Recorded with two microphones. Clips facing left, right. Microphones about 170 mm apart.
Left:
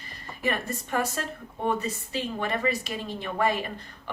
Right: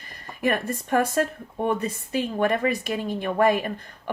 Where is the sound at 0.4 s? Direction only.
50° right (ahead or behind).